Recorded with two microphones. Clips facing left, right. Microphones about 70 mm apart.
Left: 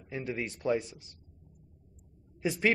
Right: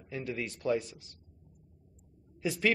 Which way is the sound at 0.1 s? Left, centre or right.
Left.